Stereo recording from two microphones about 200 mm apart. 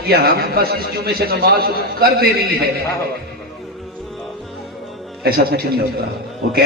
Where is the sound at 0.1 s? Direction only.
50° right (ahead or behind).